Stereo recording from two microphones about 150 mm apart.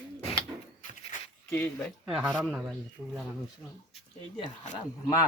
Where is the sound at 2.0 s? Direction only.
5° right (ahead or behind).